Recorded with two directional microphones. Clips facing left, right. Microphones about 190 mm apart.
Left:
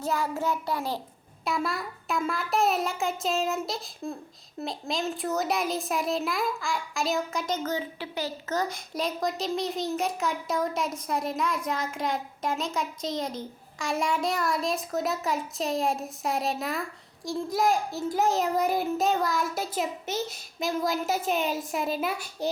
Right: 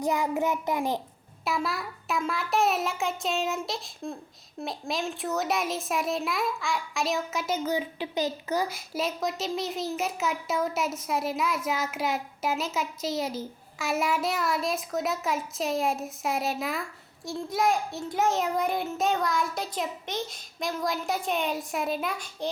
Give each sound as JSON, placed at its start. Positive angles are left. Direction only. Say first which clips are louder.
{"t": 0.0, "sound": "child singing", "louder": "right 2 dB", "side_deg": -15}
{"t": 1.5, "sound": "a child's voice", "louder": "even", "side_deg": 0}